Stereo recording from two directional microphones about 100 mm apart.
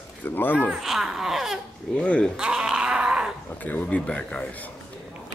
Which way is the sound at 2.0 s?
10° left (ahead or behind).